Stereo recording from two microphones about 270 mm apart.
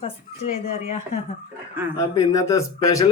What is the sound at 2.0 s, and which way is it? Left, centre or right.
A man's voice, centre.